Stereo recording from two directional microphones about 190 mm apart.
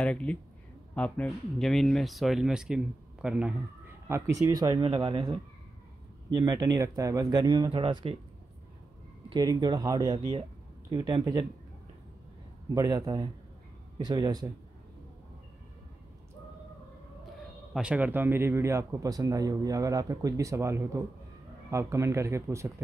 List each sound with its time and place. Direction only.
0.0 s speech: 5° left (ahead or behind)
4.4 s speech: 15° right (ahead or behind)
9.3 s speech: 20° right (ahead or behind)
12.7 s speech: 20° right (ahead or behind)
17.7 s a man's voice: 5° right (ahead or behind)